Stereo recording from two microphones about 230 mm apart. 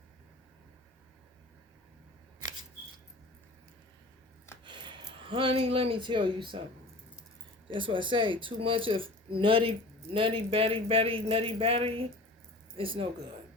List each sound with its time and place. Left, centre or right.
4.6 s speech: right
7.7 s speech: right